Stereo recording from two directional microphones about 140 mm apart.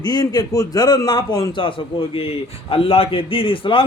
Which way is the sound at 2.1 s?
40° left (ahead or behind).